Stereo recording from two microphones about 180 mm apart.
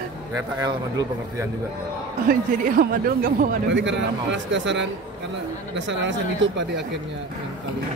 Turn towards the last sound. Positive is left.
turn(degrees=-90)